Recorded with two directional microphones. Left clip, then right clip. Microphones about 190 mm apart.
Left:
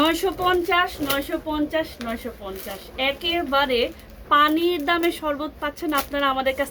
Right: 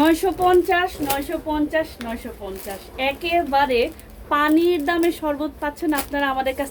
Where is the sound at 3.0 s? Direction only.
20° left (ahead or behind).